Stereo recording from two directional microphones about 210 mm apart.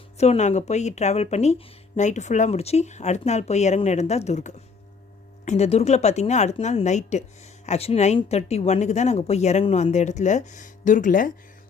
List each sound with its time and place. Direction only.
0.2 s speech: 30° left (ahead or behind)